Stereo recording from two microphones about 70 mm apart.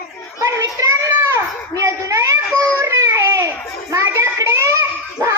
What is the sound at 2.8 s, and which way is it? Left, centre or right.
Baby cry, right.